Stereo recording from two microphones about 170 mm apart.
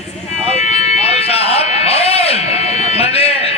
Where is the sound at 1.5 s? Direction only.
35° left (ahead or behind).